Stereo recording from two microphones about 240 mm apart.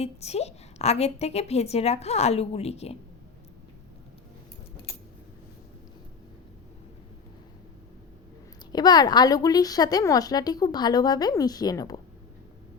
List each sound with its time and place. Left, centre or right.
0.0 s a woman's voice: left
8.7 s a woman's voice: centre